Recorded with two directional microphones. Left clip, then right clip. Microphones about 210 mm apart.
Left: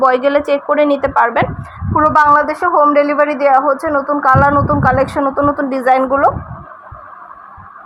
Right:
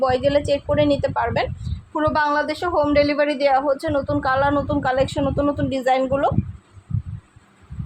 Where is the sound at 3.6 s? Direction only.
15° left (ahead or behind).